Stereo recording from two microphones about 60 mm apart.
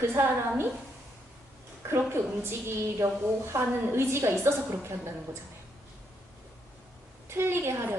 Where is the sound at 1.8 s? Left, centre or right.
Right.